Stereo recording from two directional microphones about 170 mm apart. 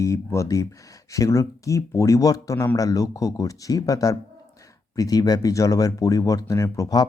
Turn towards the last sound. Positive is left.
turn(degrees=20)  # may be behind; listen again after turning